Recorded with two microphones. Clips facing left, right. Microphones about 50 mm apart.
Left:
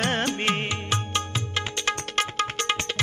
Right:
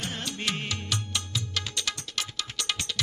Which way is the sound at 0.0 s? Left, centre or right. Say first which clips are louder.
Left 8 dB; left.